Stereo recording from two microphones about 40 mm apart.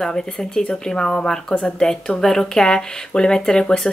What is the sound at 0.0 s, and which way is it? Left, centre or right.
Speech, centre.